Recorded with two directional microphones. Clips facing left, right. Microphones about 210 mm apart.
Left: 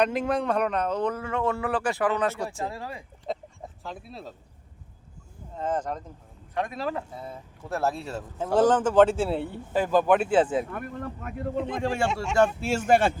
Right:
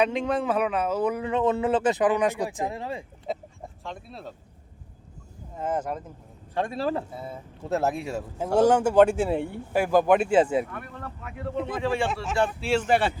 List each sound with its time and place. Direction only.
0.0 s speech: centre (ahead or behind)
1.2 s speech: 20° right (ahead or behind)
3.8 s speech: centre (ahead or behind)
5.5 s speech: 10° right (ahead or behind)
6.5 s a man's voice: 30° right (ahead or behind)
7.6 s speech: 20° right (ahead or behind)
11.8 s speech: 45° left (ahead or behind)
12.0 s speech: centre (ahead or behind)
12.5 s speech: 45° left (ahead or behind)